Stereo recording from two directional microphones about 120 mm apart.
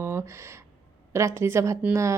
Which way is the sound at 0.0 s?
20° right (ahead or behind).